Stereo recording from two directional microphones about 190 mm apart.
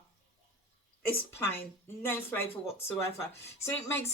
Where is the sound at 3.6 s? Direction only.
15° left (ahead or behind).